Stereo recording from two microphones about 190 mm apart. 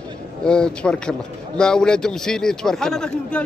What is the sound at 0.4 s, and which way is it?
A man's voice, 5° left (ahead or behind).